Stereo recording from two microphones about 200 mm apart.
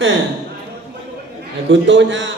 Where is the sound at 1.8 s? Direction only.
65° right (ahead or behind).